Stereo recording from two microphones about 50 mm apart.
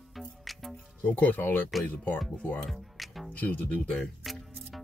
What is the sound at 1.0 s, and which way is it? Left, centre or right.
Speech, left.